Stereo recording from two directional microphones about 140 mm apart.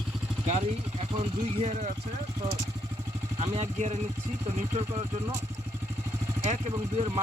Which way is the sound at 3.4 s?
50° right (ahead or behind).